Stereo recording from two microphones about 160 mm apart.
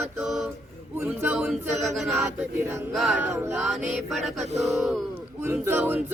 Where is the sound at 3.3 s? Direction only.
15° right (ahead or behind).